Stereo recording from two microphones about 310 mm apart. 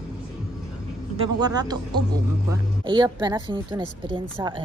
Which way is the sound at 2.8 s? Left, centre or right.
Centre.